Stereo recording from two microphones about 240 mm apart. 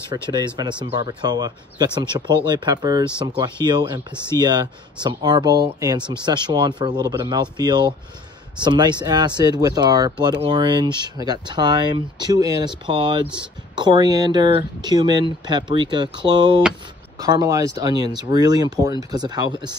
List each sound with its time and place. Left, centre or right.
0.1 s speech: centre